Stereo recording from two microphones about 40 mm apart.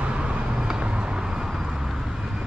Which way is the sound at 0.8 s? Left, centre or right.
Right.